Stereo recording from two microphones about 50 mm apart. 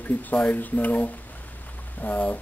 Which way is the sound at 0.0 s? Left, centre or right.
Left.